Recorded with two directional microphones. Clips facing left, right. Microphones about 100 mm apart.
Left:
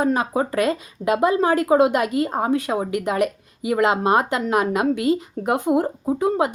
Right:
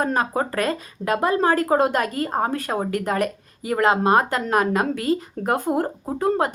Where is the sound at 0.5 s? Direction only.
20° left (ahead or behind).